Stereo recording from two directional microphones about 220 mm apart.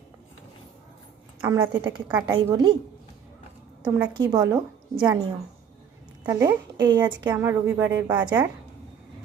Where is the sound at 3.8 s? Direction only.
5° right (ahead or behind).